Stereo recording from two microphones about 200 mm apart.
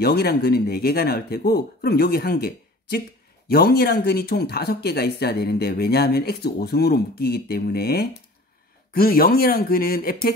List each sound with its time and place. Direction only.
0.0 s speech: 50° left (ahead or behind)